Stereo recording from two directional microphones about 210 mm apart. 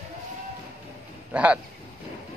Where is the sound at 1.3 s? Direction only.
5° right (ahead or behind).